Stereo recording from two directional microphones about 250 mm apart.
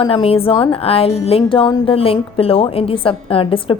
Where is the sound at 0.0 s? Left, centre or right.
Left.